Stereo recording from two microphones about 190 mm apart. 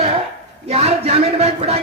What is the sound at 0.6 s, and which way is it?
A man's voice, 35° right (ahead or behind).